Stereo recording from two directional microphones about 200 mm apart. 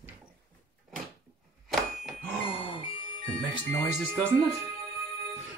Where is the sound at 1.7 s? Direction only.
Centre (ahead or behind).